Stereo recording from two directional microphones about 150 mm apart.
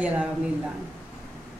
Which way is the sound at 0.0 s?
10° right (ahead or behind).